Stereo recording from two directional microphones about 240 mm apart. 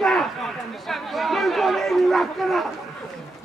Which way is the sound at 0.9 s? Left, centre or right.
Centre.